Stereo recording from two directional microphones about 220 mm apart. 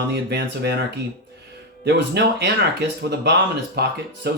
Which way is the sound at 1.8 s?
50° right (ahead or behind).